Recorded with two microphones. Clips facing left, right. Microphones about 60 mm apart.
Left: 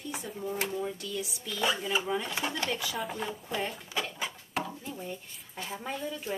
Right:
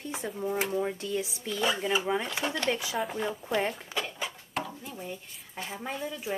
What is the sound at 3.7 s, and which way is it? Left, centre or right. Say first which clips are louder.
Dishes: even; centre.